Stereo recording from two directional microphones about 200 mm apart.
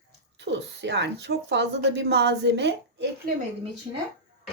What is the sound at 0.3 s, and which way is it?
A child's voice, 60° right (ahead or behind).